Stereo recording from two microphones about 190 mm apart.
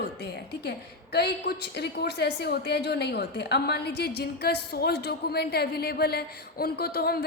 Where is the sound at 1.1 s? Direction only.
60° left (ahead or behind).